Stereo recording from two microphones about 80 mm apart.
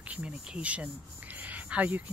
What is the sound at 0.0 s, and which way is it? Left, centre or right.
Speech, centre.